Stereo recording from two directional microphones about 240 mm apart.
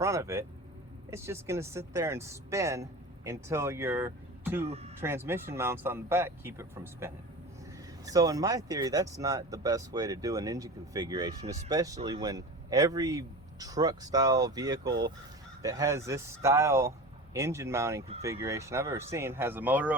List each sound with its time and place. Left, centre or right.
0.0 s speech: centre